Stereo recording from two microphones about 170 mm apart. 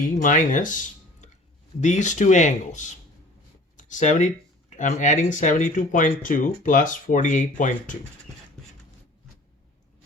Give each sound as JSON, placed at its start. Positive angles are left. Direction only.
{"t": 0.0, "sound": "speech", "side_deg": 50}
{"t": 1.2, "sound": "a sound", "side_deg": 45}
{"t": 1.8, "sound": "speech", "side_deg": 45}